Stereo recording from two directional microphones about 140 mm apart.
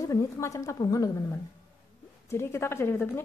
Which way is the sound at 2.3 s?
20° left (ahead or behind).